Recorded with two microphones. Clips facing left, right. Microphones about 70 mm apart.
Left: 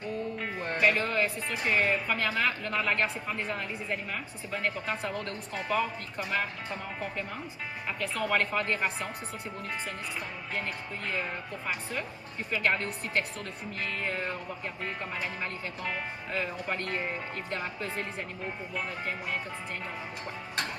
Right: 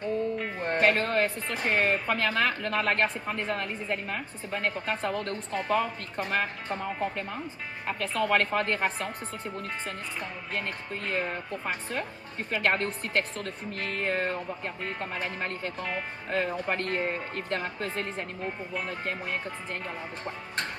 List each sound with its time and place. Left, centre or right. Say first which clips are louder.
0.6 s music: right 3 dB; right
0.9 s speech: right 1 dB; right
10.5 s speech: right 1 dB; right
11.6 s speech: even; right
18.4 s speech: right 1 dB; centre
18.9 s speech: right 2 dB; right